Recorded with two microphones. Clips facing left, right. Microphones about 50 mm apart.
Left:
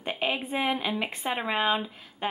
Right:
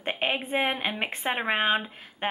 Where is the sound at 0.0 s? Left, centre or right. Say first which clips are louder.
Right 1 dB; right.